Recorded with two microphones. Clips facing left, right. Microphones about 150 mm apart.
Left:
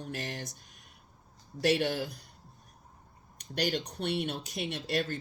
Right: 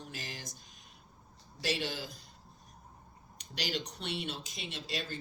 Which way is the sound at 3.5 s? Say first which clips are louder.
Left 6 dB; 55° left (ahead or behind).